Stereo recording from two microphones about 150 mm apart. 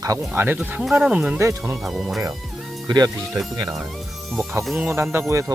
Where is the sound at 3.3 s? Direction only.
Centre (ahead or behind).